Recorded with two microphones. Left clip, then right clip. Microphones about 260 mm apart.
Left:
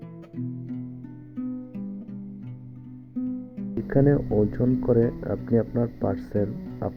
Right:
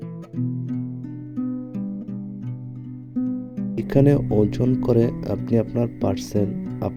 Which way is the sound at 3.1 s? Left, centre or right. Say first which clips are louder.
Right 5 dB; right.